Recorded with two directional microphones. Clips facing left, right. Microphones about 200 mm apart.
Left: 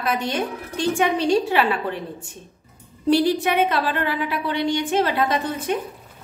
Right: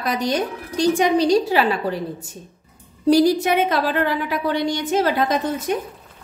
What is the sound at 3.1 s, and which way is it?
A woman's voice, 40° right (ahead or behind).